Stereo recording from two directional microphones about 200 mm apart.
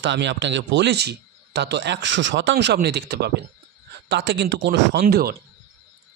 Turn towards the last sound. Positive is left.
turn(degrees=-50)  # may be behind; listen again after turning